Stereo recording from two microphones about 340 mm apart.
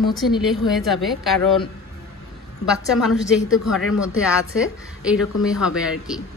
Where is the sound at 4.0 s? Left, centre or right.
Centre.